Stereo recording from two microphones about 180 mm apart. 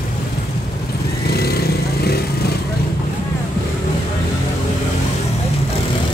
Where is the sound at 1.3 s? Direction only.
60° left (ahead or behind).